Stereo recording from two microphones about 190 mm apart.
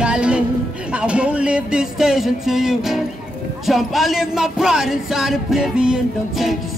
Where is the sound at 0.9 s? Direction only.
5° right (ahead or behind).